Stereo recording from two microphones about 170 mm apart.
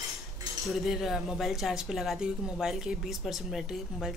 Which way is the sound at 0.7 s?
Centre (ahead or behind).